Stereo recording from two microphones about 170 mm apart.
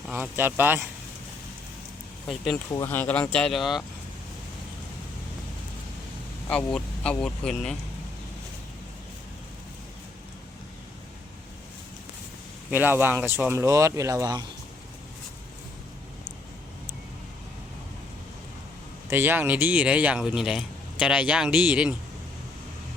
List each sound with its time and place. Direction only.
0.1 s speech: 10° right (ahead or behind)
2.5 s speech: 20° left (ahead or behind); by 3.8 s centre (ahead or behind)
6.5 s speech: 5° left (ahead or behind)
12.7 s speech: 10° right (ahead or behind)
19.0 s speech: 15° right (ahead or behind)